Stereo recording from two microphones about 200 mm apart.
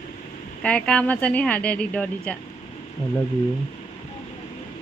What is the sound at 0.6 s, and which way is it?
Speech, 5° left (ahead or behind).